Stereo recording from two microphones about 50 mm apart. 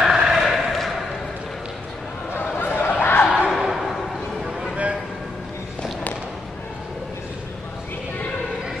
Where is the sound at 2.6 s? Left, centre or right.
Left.